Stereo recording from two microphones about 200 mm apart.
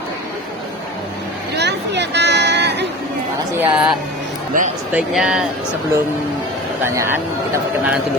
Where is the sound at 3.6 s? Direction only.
5° right (ahead or behind).